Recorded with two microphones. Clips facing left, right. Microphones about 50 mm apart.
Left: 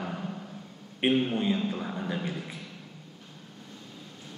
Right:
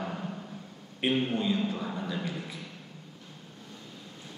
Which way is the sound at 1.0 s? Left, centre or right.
Left.